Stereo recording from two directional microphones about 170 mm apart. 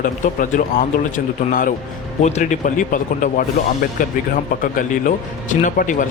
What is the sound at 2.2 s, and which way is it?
Speech, 40° left (ahead or behind).